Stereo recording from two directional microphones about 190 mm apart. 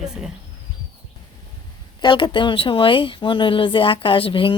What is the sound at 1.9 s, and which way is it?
Speech, 25° left (ahead or behind).